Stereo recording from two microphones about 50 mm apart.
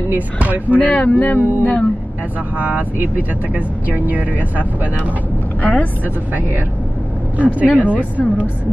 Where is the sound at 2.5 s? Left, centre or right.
Right.